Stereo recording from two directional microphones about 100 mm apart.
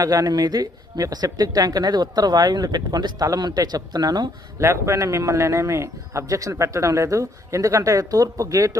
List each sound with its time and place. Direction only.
0.0 s speech: 35° right (ahead or behind)
4.6 s speech: 30° right (ahead or behind)